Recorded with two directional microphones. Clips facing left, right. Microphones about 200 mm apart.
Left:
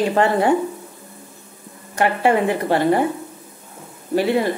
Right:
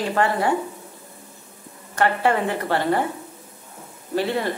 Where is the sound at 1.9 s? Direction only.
15° left (ahead or behind).